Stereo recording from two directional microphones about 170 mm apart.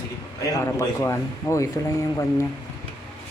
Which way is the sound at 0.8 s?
15° left (ahead or behind).